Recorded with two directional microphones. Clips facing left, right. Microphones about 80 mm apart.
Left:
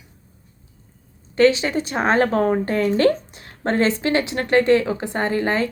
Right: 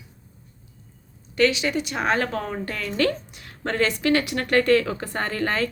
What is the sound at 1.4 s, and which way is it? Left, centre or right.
A woman's voice, left.